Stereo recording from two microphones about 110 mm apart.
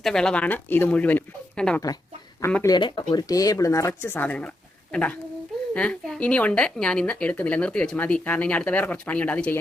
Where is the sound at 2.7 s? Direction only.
45° left (ahead or behind).